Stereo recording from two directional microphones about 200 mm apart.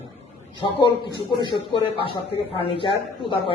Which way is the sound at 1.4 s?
25° left (ahead or behind).